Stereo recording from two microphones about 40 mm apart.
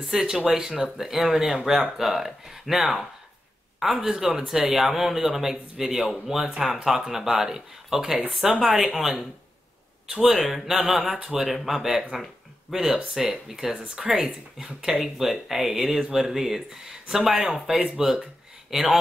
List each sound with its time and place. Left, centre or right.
0.0 s speech: centre
4.0 s speech: centre
10.2 s speech: centre